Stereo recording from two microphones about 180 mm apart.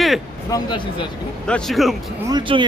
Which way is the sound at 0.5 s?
25° left (ahead or behind).